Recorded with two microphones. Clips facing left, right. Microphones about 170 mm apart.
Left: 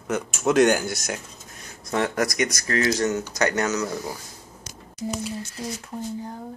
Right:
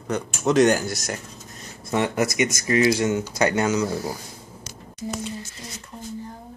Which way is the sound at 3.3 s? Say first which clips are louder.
Right 2 dB; 25° right (ahead or behind).